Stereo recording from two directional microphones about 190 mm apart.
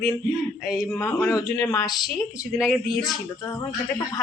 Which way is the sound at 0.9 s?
15° left (ahead or behind).